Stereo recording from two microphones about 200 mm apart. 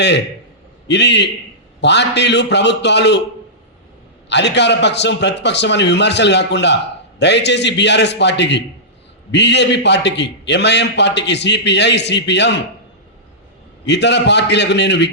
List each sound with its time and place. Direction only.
0.9 s a man's voice: 60° left (ahead or behind)
4.3 s a man's voice: 60° left (ahead or behind)
13.8 s a man's voice: 60° left (ahead or behind)